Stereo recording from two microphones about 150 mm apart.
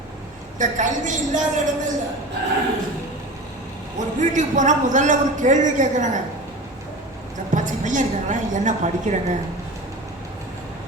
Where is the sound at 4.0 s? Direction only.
55° right (ahead or behind).